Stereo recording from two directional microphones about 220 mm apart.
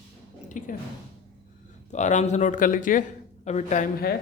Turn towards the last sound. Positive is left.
turn(degrees=40)  # may be behind; listen again after turning